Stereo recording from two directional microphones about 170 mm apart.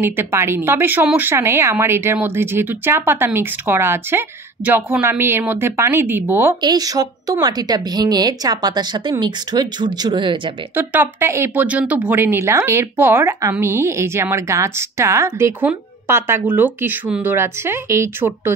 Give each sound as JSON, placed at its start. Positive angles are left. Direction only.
{"t": 0.0, "sound": "speech", "side_deg": -15}
{"t": 10.8, "sound": "speech", "side_deg": -10}